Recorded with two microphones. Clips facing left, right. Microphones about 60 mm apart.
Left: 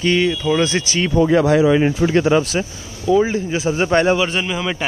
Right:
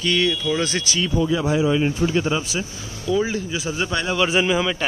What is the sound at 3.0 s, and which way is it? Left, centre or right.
Speech, left.